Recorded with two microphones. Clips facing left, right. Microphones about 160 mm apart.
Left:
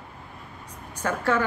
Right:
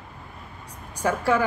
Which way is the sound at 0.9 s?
10° right (ahead or behind).